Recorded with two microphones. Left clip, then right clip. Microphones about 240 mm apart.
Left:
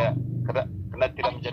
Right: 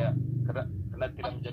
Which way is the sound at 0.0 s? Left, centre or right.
Left.